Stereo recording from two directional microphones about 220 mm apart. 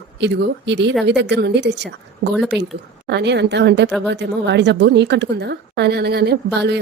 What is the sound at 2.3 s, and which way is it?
Speech, centre (ahead or behind).